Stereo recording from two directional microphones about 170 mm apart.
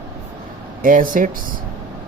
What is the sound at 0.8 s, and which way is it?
Speech, 55° right (ahead or behind).